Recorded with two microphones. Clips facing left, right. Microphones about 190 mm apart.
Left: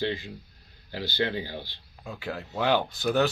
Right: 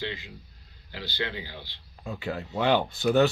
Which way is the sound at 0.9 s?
40° left (ahead or behind).